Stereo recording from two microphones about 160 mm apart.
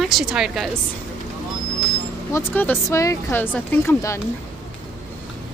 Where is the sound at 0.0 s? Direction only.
Centre (ahead or behind).